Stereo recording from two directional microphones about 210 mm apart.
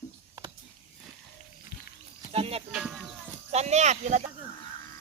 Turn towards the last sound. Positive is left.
turn(degrees=-35)  # may be behind; listen again after turning